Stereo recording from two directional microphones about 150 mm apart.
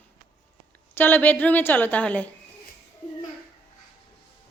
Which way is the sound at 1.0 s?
15° left (ahead or behind).